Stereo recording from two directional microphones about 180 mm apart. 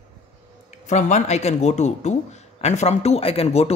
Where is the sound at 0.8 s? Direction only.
40° left (ahead or behind).